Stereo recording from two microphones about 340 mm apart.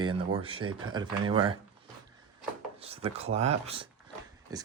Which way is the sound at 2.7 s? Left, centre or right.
Centre.